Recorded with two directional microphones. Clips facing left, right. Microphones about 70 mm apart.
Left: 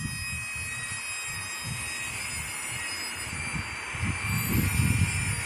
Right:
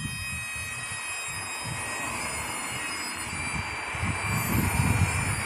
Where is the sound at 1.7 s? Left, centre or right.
Right.